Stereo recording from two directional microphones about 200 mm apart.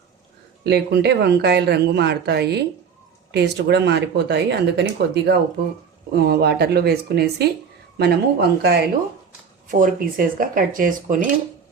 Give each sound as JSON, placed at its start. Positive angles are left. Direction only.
{"t": 0.6, "sound": "speech", "side_deg": -55}
{"t": 9.8, "sound": "speech", "side_deg": -45}